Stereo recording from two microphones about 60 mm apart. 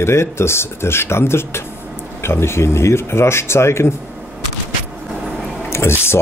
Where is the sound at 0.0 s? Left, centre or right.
Left.